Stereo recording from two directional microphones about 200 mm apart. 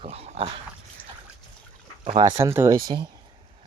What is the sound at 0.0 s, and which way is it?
Dog, 30° right (ahead or behind).